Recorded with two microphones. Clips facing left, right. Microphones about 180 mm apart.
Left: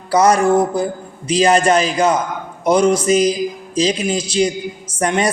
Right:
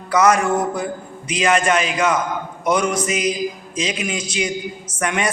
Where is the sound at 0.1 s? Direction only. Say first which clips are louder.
Left 3 dB; 35° left (ahead or behind).